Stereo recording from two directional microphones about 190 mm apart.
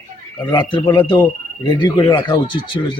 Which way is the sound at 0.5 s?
25° left (ahead or behind).